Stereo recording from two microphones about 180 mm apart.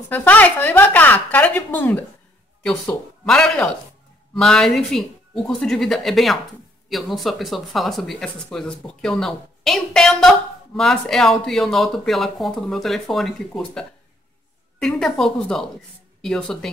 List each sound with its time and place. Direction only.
0.1 s speech: 10° left (ahead or behind)